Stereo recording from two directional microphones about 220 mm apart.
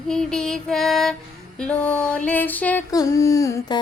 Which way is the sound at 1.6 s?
5° left (ahead or behind).